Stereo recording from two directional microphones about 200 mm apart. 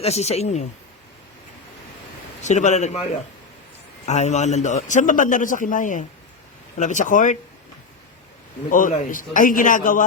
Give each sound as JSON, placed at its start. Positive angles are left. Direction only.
{"t": 0.0, "sound": "a man's voice", "side_deg": 30}
{"t": 2.4, "sound": "a man's voice", "side_deg": 35}
{"t": 4.0, "sound": "a man's voice", "side_deg": 35}
{"t": 8.7, "sound": "a man's voice", "side_deg": 40}